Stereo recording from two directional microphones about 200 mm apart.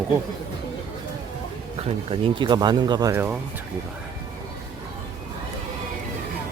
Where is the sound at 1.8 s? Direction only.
25° right (ahead or behind); by 3.4 s 10° right (ahead or behind).